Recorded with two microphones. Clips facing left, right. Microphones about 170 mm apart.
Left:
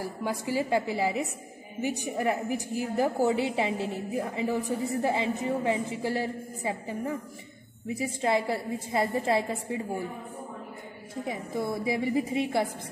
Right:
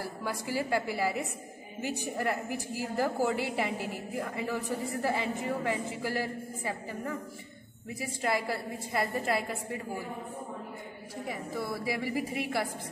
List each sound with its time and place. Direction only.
0.2 s a woman's voice: 20° left (ahead or behind)
11.2 s a woman's voice: 20° left (ahead or behind)